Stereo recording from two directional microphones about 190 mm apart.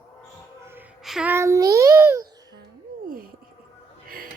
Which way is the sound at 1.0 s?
5° right (ahead or behind).